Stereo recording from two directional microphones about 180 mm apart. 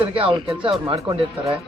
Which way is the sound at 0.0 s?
30° right (ahead or behind).